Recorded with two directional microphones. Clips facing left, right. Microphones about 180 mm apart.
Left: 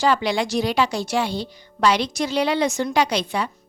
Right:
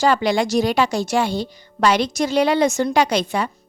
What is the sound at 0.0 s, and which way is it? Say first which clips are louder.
Speech: right 3 dB; 45° right (ahead or behind).